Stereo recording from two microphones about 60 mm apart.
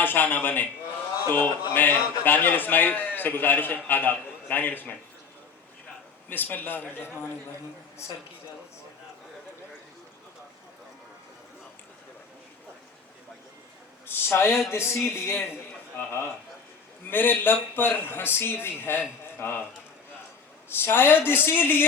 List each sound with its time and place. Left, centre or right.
0.0 s a man's voice: left
6.2 s a man's voice: left
14.1 s a man's voice: left
17.1 s a man's voice: left
20.7 s a man's voice: left